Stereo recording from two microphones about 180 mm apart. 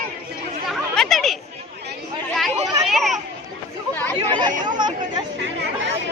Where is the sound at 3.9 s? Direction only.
10° left (ahead or behind).